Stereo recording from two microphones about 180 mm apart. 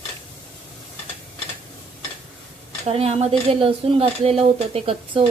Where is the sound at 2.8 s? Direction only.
35° right (ahead or behind).